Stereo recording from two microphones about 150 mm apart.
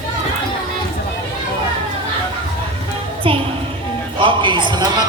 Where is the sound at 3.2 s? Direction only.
40° right (ahead or behind).